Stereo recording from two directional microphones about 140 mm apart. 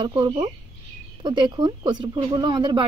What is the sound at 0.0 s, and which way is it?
Speech, 40° right (ahead or behind).